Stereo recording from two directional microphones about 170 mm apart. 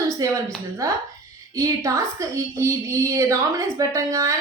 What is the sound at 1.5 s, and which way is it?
A woman's voice, 20° right (ahead or behind).